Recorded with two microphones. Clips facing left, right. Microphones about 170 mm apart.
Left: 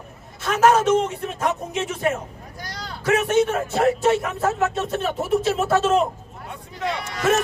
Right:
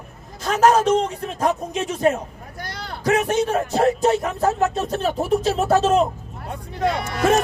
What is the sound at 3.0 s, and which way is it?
A man's voice, 35° right (ahead or behind).